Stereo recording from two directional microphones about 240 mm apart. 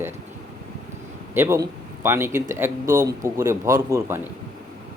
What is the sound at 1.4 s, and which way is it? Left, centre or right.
Speech, centre.